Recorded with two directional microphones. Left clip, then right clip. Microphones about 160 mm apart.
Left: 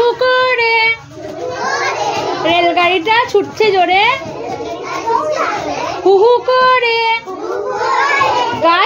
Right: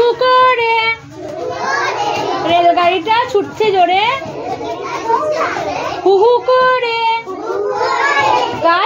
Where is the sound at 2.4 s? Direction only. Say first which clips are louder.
Right 1 dB; 30° left (ahead or behind).